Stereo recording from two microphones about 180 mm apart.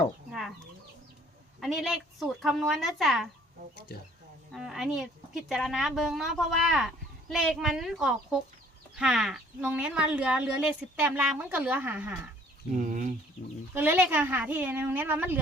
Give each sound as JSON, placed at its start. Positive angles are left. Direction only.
{"t": 0.3, "sound": "chicken", "side_deg": 0}
{"t": 1.6, "sound": "a woman's voice", "side_deg": 0}
{"t": 4.5, "sound": "a woman's voice", "side_deg": 0}
{"t": 12.7, "sound": "speech", "side_deg": -45}
{"t": 13.7, "sound": "a woman's voice", "side_deg": -10}